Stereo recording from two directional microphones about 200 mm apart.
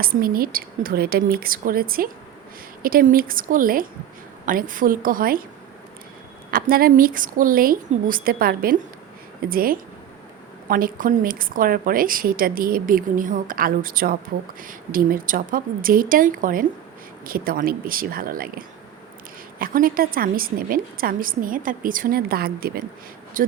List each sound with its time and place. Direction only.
0.0 s a woman's voice: 45° right (ahead or behind)
6.5 s a woman's voice: 45° right (ahead or behind)